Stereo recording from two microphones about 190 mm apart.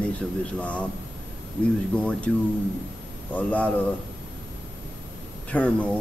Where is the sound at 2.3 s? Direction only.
5° left (ahead or behind).